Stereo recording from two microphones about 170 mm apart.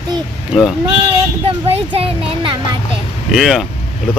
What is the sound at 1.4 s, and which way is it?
Speech, 35° right (ahead or behind).